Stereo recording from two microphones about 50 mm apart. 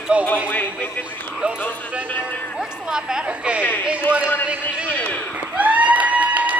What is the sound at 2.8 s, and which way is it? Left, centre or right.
A woman's voice, centre.